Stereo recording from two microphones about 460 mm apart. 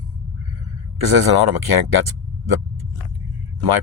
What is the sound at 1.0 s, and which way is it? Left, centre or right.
Speech, right.